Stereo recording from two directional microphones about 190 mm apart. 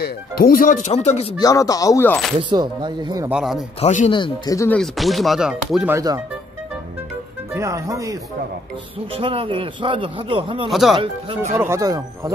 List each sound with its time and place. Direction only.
0.0 s speech: 50° left (ahead or behind); by 1.3 s 35° left (ahead or behind)
1.4 s speech: 20° left (ahead or behind)
2.5 s a man's voice: 25° right (ahead or behind)
3.3 s speech: 5° right (ahead or behind)
3.8 s speech: 40° left (ahead or behind)
4.1 s speech: 20° left (ahead or behind)
4.7 s speech: centre (ahead or behind)
5.9 s speech: 15° right (ahead or behind)
7.5 s speech: 15° right (ahead or behind)
9.1 s a man's voice: 30° right (ahead or behind)
10.7 s speech: centre (ahead or behind)
11.0 s a man's voice: 30° right (ahead or behind)
11.5 s speech: 15° right (ahead or behind)